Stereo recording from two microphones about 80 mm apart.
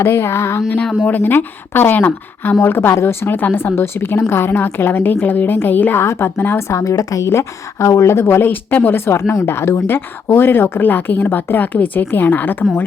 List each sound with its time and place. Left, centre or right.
0.0 s music: left
1.0 s speech: left